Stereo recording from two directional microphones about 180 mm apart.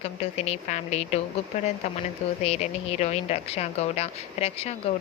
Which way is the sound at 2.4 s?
35° left (ahead or behind).